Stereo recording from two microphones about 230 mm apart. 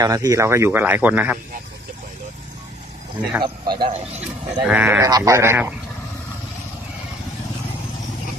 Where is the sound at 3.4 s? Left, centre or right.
Centre.